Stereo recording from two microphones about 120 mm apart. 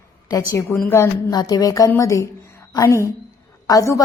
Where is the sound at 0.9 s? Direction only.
25° left (ahead or behind).